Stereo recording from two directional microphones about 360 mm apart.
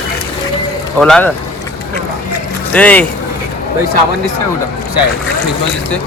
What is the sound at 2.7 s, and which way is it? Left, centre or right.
Speech, centre.